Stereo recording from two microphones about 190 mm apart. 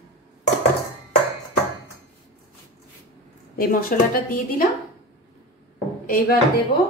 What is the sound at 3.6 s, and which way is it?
Speech, 50° left (ahead or behind).